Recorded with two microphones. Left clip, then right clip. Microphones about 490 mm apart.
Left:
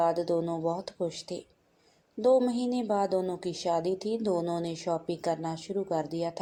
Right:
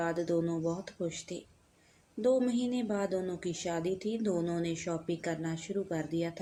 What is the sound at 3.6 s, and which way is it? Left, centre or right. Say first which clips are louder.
A woman's voice: left 7 dB; right.